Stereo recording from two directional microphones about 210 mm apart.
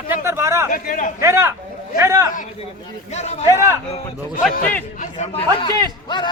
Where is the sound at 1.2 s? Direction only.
10° right (ahead or behind).